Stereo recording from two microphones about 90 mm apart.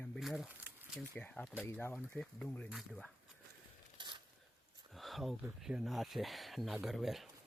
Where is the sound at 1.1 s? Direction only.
15° left (ahead or behind).